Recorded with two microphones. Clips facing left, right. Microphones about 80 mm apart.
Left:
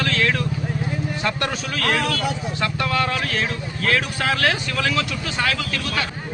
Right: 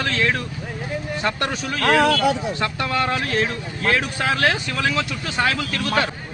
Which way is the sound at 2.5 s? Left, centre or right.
Right.